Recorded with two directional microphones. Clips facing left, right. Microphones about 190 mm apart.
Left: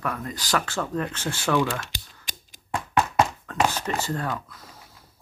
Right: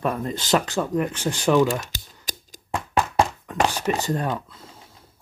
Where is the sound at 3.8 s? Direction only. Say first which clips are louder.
Right 4 dB; 15° right (ahead or behind).